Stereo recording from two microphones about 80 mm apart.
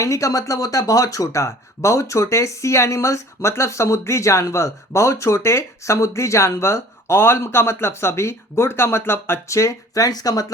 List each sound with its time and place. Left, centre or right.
0.0 s speech: left